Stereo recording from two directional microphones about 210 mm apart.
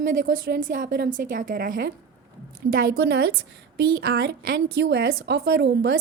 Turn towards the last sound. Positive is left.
turn(degrees=-55)  # may be behind; listen again after turning